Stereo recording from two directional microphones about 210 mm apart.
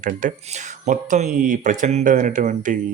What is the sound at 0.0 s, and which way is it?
Speech, 40° right (ahead or behind).